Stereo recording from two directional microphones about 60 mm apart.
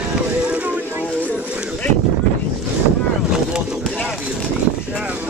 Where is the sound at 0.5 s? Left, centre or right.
Right.